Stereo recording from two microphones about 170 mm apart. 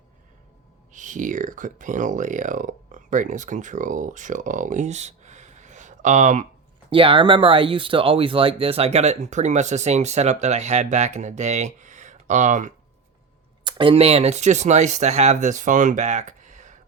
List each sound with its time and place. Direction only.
0.9 s speech: 50° right (ahead or behind)
6.9 s speech: 30° right (ahead or behind); by 12.7 s 45° right (ahead or behind)
13.7 s speech: 30° right (ahead or behind); by 16.8 s 45° right (ahead or behind)